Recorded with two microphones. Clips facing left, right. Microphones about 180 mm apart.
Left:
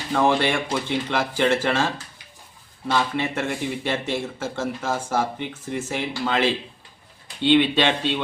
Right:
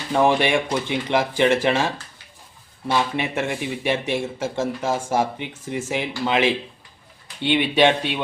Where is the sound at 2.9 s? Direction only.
15° right (ahead or behind).